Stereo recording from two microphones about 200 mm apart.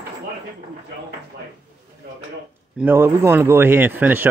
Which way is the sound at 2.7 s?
10° right (ahead or behind).